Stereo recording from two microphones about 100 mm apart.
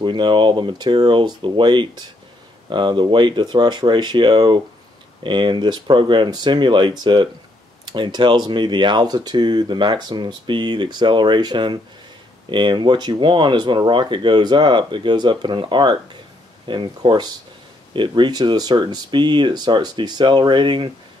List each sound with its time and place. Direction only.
0.0 s speech: 50° right (ahead or behind)